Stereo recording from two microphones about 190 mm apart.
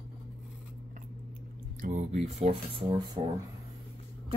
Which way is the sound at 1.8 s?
40° right (ahead or behind).